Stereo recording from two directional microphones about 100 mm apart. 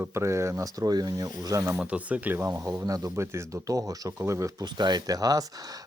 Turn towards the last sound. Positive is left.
turn(degrees=-40)  # may be behind; listen again after turning